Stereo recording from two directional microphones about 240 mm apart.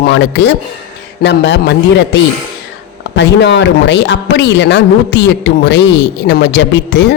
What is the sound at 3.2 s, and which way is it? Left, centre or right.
A man's voice, left.